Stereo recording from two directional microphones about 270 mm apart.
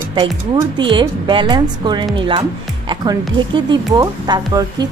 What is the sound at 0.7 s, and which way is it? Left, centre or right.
Speech, centre.